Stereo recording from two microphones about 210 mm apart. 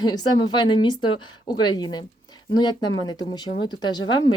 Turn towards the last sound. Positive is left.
turn(degrees=20)  # may be behind; listen again after turning